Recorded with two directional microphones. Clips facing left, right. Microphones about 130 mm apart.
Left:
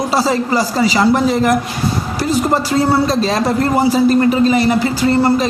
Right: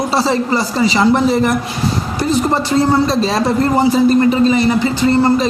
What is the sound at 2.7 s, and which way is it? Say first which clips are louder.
Speech: right 3 dB; centre (ahead or behind).